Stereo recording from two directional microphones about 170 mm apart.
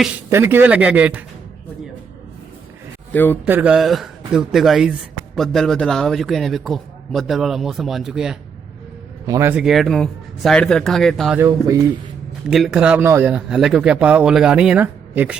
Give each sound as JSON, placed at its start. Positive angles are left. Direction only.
{"t": 0.3, "sound": "speech", "side_deg": -15}
{"t": 3.1, "sound": "a man's voice", "side_deg": 10}
{"t": 3.4, "sound": "a man's voice", "side_deg": -10}
{"t": 9.2, "sound": "a man's voice", "side_deg": -20}
{"t": 11.3, "sound": "speech", "side_deg": -15}
{"t": 12.5, "sound": "speech", "side_deg": 0}